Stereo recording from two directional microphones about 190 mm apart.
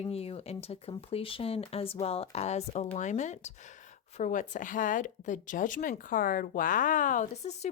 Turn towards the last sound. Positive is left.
turn(degrees=40)  # may be behind; listen again after turning